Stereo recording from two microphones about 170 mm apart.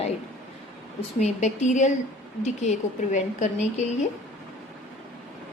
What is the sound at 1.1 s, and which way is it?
A woman's voice, 40° left (ahead or behind).